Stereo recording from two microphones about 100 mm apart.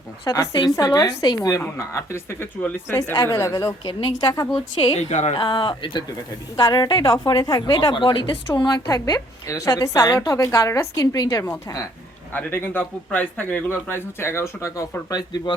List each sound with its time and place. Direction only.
0.5 s a woman's voice: 40° left (ahead or behind)
3.8 s a woman's voice: 45° left (ahead or behind)
4.8 s a woman's voice: 55° left (ahead or behind)
7.9 s a woman's voice: 55° left (ahead or behind); by 11.5 s 35° left (ahead or behind)
12.3 s a man's voice: 20° left (ahead or behind)